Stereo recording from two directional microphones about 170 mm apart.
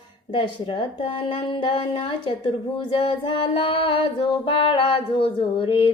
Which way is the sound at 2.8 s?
30° left (ahead or behind).